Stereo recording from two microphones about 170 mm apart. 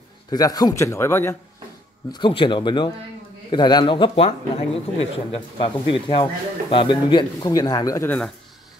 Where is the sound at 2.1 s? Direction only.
30° left (ahead or behind).